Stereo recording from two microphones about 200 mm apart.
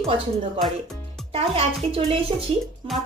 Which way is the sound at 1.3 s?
30° right (ahead or behind).